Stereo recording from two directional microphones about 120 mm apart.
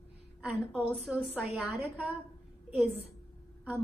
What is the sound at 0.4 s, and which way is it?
A woman's voice, 10° right (ahead or behind).